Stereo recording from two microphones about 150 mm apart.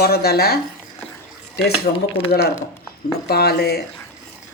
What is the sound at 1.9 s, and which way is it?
Speech, 40° left (ahead or behind).